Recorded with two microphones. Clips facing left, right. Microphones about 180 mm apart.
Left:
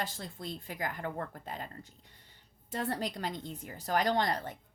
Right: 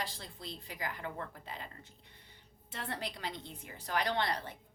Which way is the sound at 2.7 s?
40° left (ahead or behind).